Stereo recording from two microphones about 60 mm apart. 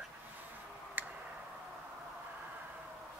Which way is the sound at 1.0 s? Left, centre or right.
Right.